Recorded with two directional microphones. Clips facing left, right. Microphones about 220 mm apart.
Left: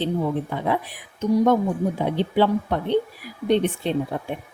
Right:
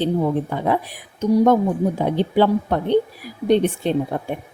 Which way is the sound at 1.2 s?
45° right (ahead or behind).